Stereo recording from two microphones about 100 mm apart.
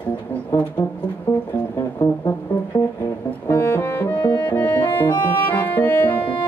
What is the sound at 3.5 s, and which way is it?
Music, 20° left (ahead or behind).